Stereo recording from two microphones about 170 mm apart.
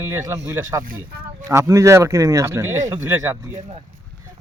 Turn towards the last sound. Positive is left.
turn(degrees=-20)  # may be behind; listen again after turning